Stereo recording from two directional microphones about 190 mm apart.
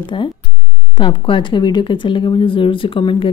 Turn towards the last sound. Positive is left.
turn(degrees=25)  # may be behind; listen again after turning